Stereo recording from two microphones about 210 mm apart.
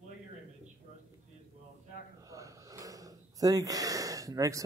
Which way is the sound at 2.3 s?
15° right (ahead or behind).